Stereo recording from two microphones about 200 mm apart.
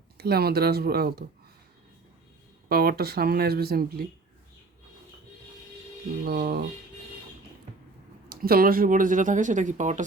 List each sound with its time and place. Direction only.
0.2 s speech: 50° right (ahead or behind)
2.6 s speech: 50° right (ahead or behind)
6.2 s speech: 50° right (ahead or behind)
8.3 s speech: 50° right (ahead or behind)